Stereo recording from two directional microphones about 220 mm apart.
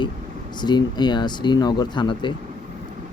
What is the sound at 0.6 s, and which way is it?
Speech, 20° left (ahead or behind).